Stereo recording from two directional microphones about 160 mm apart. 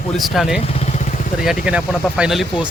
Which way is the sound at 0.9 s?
45° left (ahead or behind).